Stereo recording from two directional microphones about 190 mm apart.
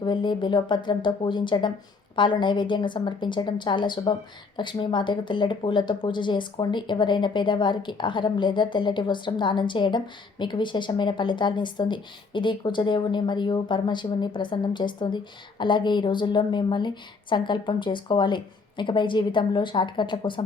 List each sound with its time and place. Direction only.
0.0 s a woman's voice: 25° left (ahead or behind)